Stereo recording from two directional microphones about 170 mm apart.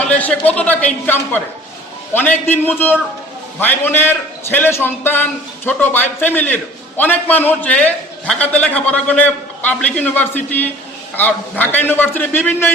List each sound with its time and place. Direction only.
0.0 s a man's voice: 5° left (ahead or behind)